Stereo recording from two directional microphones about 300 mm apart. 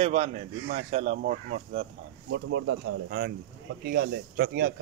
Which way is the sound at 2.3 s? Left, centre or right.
Right.